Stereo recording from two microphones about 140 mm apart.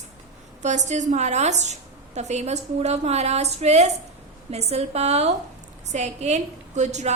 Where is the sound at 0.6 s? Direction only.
55° right (ahead or behind).